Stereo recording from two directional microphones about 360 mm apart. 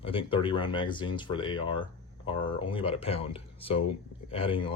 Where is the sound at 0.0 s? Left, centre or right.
Centre.